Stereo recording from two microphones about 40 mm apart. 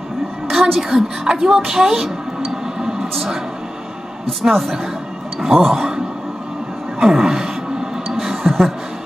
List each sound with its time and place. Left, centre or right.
0.5 s a woman's voice: centre
1.6 s speech: centre
2.8 s a sound: centre
4.4 s speech: centre
7.0 s speech: centre
8.2 s a sound: centre